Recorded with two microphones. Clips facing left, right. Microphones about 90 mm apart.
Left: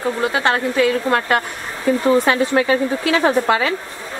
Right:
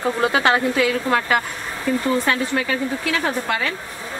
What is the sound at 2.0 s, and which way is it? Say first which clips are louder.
A woman's voice: left 7 dB; 20° left (ahead or behind).